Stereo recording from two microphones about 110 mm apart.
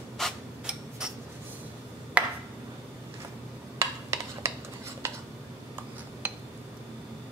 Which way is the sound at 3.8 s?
25° right (ahead or behind).